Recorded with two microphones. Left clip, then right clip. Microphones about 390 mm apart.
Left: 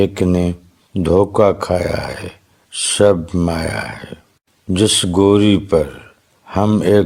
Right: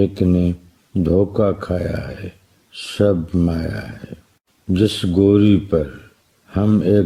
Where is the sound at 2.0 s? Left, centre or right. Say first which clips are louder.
Left 7 dB; centre.